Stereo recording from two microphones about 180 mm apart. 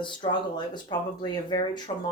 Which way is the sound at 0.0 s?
25° left (ahead or behind).